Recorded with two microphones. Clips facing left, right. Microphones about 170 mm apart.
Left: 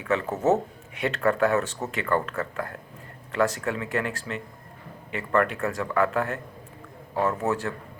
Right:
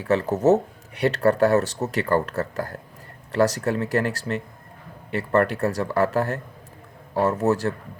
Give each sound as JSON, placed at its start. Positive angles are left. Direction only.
{"t": 0.0, "sound": "speech", "side_deg": -35}